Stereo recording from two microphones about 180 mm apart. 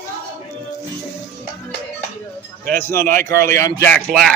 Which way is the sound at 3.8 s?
5° left (ahead or behind).